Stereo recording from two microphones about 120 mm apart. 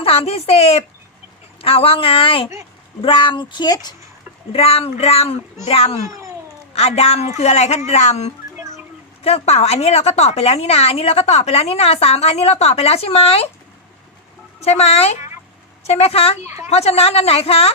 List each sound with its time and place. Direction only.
0.0 s a woman's voice: 50° left (ahead or behind); by 3.9 s 35° left (ahead or behind)
4.5 s a woman's voice: 55° left (ahead or behind)
6.1 s cat: 25° right (ahead or behind)
6.7 s a woman's voice: 60° left (ahead or behind)
8.5 s a sound: 25° right (ahead or behind)
9.2 s a woman's voice: 60° left (ahead or behind)
14.6 s a woman's voice: 65° left (ahead or behind)